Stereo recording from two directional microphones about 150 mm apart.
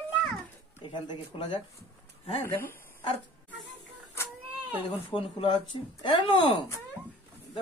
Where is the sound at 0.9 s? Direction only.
35° left (ahead or behind).